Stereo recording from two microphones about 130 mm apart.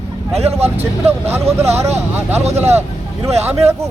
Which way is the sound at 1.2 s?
20° right (ahead or behind).